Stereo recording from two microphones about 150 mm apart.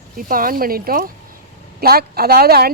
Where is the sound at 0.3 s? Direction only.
70° right (ahead or behind).